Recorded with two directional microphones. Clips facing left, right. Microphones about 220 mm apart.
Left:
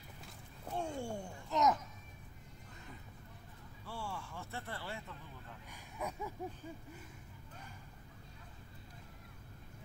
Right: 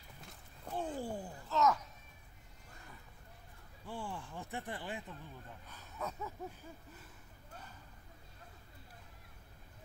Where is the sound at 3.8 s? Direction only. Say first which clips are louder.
Right 1 dB; 15° right (ahead or behind).